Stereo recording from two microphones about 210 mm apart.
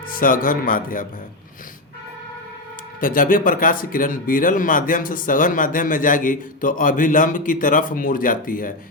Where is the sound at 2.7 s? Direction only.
40° left (ahead or behind).